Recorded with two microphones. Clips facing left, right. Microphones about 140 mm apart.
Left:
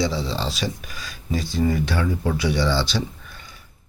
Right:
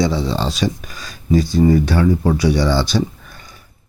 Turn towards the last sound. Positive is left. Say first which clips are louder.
# right 8 dB
turn(degrees=-45)  # may be behind; listen again after turning